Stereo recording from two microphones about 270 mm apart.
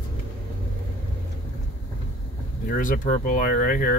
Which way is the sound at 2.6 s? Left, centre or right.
Left.